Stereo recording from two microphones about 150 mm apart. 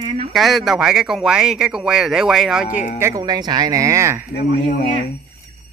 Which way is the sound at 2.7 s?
55° left (ahead or behind).